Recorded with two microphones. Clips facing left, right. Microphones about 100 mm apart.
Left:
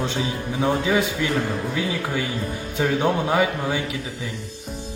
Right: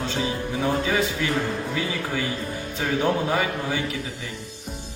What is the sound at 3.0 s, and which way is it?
Speech, 20° left (ahead or behind).